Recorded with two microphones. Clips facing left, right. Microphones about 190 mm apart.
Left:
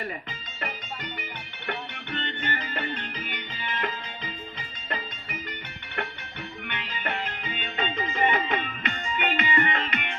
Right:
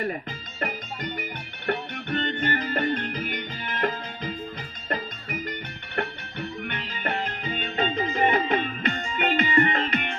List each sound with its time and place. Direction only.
0.6 s music: 45° right (ahead or behind)
6.7 s music: 40° right (ahead or behind)